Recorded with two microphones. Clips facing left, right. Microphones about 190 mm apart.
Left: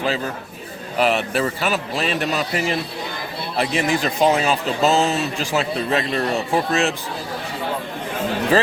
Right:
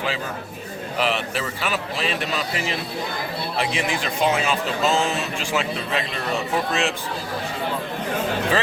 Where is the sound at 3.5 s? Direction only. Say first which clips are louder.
Left 6 dB; 40° left (ahead or behind).